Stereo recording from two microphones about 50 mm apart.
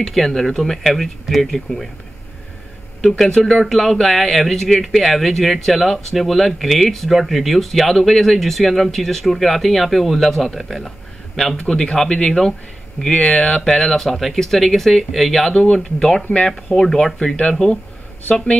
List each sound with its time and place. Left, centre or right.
0.0 s speech: centre
3.0 s speech: centre
11.5 s speech: centre
15.5 s speech: centre